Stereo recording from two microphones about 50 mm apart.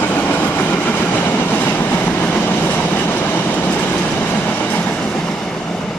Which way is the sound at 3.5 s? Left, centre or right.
Left.